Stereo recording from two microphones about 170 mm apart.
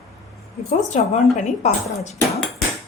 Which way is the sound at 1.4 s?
45° left (ahead or behind).